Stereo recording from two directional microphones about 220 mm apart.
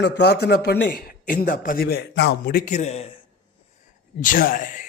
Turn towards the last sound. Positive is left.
turn(degrees=35)  # may be behind; listen again after turning